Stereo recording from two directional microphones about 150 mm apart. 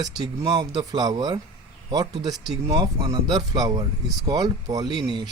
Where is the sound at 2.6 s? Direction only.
30° right (ahead or behind).